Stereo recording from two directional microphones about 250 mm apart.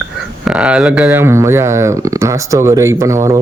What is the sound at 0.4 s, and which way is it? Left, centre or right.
Speech, centre.